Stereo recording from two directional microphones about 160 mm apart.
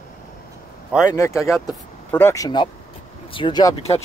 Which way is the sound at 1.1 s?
20° left (ahead or behind).